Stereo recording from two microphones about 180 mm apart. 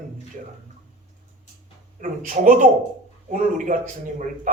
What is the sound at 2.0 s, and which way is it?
A man's voice, 45° right (ahead or behind).